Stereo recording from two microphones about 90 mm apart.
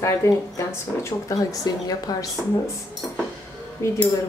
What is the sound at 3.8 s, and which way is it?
Speech, 30° left (ahead or behind).